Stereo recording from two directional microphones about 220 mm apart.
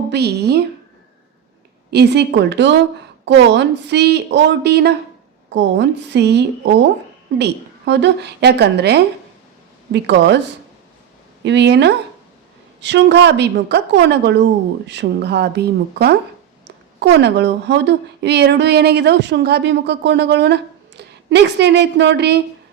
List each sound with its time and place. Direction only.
0.1 s a woman's voice: 50° right (ahead or behind)
1.9 s a woman's voice: 50° right (ahead or behind)
11.4 s a woman's voice: 50° right (ahead or behind)